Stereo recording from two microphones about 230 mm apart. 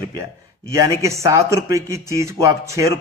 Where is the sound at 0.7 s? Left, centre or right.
Centre.